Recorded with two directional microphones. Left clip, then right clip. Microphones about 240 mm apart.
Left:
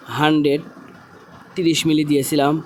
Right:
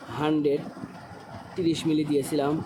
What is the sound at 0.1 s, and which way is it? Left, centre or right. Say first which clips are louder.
Speech: left 8 dB; left.